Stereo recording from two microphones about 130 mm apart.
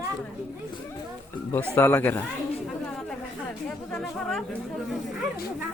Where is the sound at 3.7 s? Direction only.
5° left (ahead or behind).